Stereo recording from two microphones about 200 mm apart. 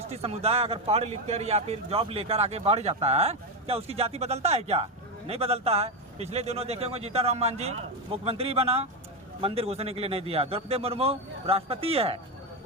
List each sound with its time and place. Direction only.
0.0 s a man's voice: 30° right (ahead or behind)